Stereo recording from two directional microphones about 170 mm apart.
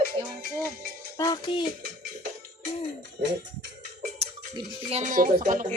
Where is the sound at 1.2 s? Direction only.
25° left (ahead or behind).